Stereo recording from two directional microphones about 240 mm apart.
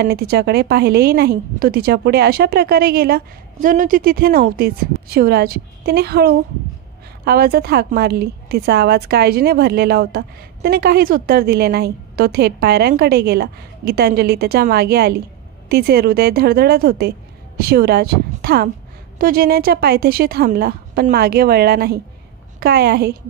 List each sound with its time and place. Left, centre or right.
0.0 s a woman's voice: right